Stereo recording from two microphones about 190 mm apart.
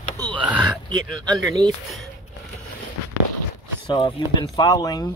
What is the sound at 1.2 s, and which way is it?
Speech, 20° right (ahead or behind).